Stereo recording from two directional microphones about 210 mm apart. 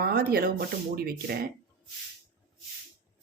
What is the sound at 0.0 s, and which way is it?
Speech, 45° right (ahead or behind).